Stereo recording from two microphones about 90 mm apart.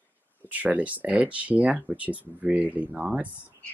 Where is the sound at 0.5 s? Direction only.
15° right (ahead or behind).